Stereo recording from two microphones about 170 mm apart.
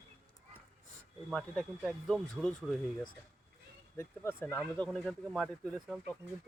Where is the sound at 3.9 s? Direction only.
15° left (ahead or behind).